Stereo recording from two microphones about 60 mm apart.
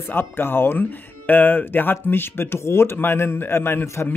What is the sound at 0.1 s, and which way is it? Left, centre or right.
Speech, left.